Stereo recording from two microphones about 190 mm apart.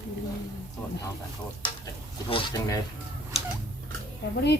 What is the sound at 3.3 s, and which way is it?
Tick-tock, 35° left (ahead or behind).